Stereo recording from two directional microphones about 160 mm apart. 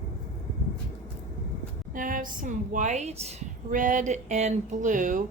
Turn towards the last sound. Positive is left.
turn(degrees=-55)  # may be behind; listen again after turning